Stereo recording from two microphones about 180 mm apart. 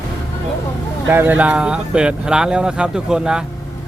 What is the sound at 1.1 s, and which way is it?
Speech, 10° right (ahead or behind).